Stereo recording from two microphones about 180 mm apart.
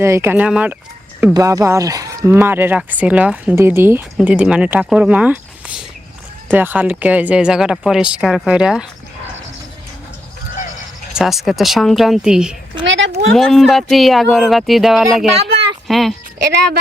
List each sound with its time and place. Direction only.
0.0 s speech: 15° right (ahead or behind)
1.3 s speech: 15° right (ahead or behind)
11.1 s speech: centre (ahead or behind)
12.8 s a sound: 90° right
13.3 s speech: centre (ahead or behind)
16.4 s speech: 65° right (ahead or behind)